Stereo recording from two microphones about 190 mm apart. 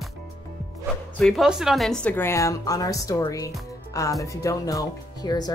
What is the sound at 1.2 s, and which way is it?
A woman's voice, centre (ahead or behind).